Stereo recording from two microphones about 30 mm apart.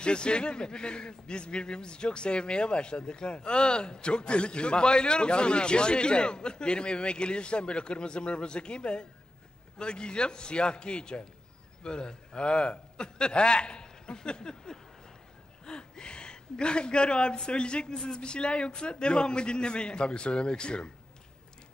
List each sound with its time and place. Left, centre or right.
0.0 s a man's voice: left
15.6 s a sound: left
17.5 s a man's voice: left